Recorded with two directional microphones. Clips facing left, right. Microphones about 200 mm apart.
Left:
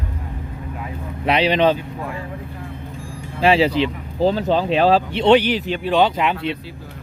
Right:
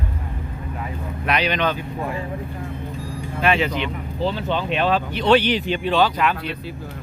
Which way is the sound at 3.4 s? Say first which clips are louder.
Left 5 dB; 30° left (ahead or behind).